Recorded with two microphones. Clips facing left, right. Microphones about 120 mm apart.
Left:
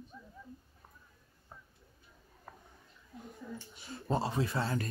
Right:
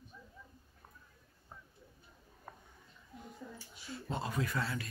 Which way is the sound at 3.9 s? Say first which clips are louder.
Left 6 dB; 40° left (ahead or behind).